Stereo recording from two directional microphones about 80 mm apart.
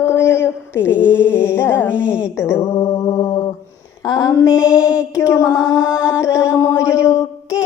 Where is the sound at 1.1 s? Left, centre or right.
Left.